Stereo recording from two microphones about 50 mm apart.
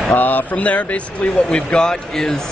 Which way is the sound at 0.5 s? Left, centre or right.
Left.